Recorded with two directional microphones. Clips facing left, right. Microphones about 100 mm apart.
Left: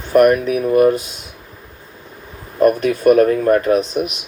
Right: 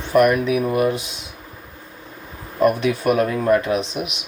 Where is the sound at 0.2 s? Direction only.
45° left (ahead or behind).